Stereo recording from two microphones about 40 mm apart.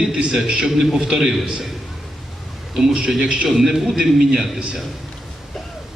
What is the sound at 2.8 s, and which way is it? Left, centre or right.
Speech, centre.